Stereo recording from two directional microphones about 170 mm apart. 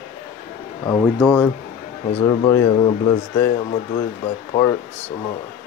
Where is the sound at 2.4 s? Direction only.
15° left (ahead or behind).